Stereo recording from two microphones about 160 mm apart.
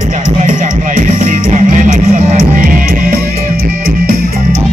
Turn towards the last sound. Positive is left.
turn(degrees=-60)  # may be behind; listen again after turning